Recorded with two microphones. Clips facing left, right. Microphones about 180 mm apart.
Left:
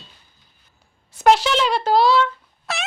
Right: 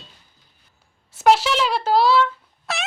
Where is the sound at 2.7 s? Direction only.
Centre (ahead or behind).